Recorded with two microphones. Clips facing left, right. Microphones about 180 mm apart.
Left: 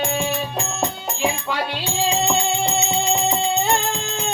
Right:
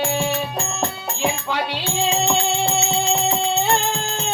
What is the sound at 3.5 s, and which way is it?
Music, 15° left (ahead or behind).